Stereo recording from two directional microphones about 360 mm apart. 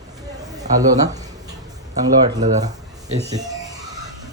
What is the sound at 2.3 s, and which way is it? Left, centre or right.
A man's voice, centre.